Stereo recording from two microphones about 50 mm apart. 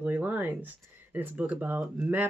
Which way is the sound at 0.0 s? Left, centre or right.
Right.